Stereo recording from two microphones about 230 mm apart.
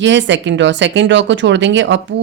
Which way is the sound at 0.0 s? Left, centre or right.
Right.